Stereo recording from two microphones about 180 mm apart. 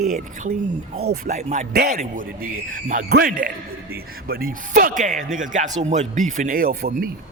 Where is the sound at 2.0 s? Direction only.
50° right (ahead or behind).